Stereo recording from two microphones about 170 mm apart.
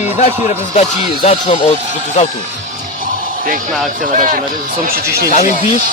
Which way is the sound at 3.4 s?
55° right (ahead or behind).